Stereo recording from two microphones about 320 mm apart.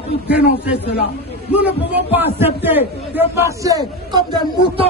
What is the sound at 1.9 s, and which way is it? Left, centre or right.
A man's voice, centre.